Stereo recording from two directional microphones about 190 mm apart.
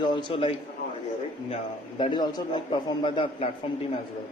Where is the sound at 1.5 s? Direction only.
25° left (ahead or behind).